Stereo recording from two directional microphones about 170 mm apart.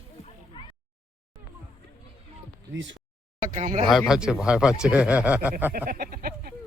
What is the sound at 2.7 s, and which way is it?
Speech, 90° right.